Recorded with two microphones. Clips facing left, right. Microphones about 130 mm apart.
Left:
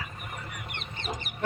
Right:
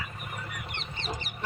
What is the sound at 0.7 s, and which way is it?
Chicken, 50° left (ahead or behind).